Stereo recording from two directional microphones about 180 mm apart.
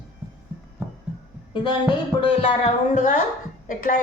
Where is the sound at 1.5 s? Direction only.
25° left (ahead or behind).